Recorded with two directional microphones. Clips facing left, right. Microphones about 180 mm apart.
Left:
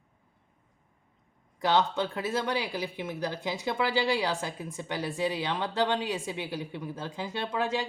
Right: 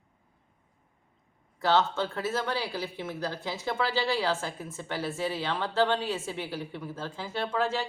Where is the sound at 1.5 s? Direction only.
15° left (ahead or behind).